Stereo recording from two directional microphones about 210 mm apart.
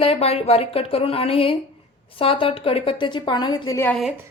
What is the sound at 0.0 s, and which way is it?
A woman's voice, 30° left (ahead or behind).